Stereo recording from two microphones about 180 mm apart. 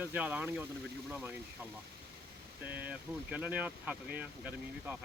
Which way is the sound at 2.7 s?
10° right (ahead or behind).